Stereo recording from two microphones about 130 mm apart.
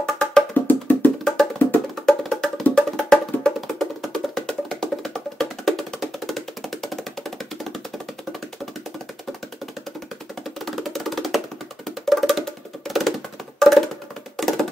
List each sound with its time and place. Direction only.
0.0 s music: 5° left (ahead or behind)
0.7 s music: 15° left (ahead or behind)
1.2 s music: centre (ahead or behind)
10.6 s music: centre (ahead or behind)